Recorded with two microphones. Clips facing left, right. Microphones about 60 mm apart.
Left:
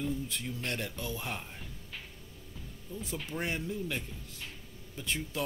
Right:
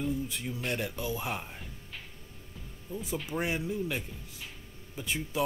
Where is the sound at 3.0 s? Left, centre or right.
Centre.